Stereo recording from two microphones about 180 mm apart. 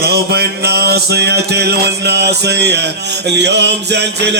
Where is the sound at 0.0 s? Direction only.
60° right (ahead or behind).